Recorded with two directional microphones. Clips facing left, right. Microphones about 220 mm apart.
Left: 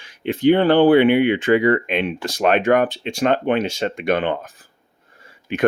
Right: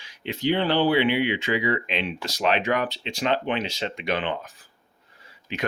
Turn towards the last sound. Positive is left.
turn(degrees=50)  # may be behind; listen again after turning